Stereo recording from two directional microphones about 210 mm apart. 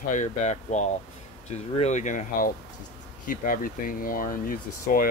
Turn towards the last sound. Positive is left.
turn(degrees=40)  # may be behind; listen again after turning